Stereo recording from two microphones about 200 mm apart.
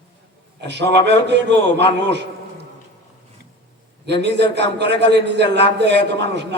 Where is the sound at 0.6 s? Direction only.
60° right (ahead or behind).